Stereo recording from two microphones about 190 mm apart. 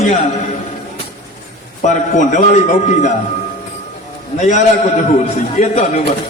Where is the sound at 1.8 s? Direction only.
40° left (ahead or behind).